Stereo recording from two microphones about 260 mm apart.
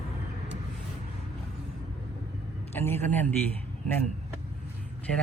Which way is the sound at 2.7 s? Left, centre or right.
Centre.